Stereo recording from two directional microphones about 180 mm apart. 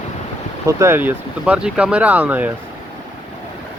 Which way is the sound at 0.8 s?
10° right (ahead or behind).